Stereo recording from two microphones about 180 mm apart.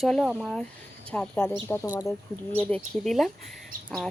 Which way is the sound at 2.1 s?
5° left (ahead or behind).